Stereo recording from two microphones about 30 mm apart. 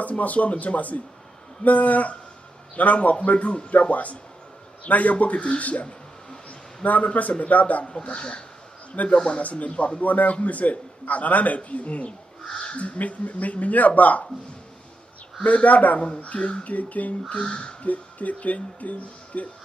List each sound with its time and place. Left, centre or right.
0.2 s a man's voice: left
5.2 s a man's voice: left
7.8 s speech: left
9.0 s speech: left
10.0 s speech: left
15.4 s speech: left
16.2 s speech: left
16.6 s speech: left
17.4 s speech: left
17.8 s speech: left